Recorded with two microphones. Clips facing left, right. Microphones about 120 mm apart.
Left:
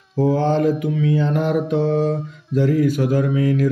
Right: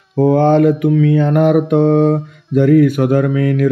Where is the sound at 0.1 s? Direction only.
60° right (ahead or behind).